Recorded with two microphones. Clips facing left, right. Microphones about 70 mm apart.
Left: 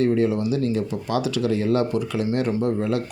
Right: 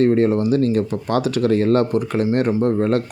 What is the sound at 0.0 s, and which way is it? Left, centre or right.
Speech, right.